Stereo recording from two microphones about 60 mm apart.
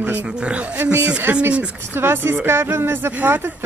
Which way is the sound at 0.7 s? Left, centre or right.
Right.